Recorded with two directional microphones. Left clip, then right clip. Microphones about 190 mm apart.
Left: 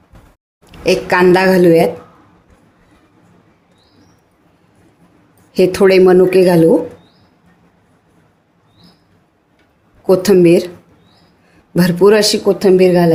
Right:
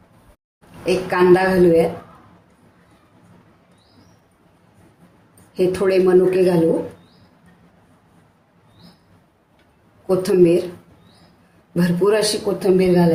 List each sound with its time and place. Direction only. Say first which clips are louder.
0.9 s speech: left 4 dB; 55° left (ahead or behind)
5.5 s speech: left 8 dB; 55° left (ahead or behind)
10.1 s speech: left 6 dB; 50° left (ahead or behind)
11.7 s speech: left 8 dB; 50° left (ahead or behind)